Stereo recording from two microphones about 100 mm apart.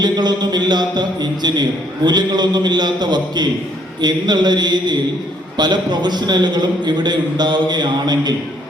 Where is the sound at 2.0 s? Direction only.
45° right (ahead or behind).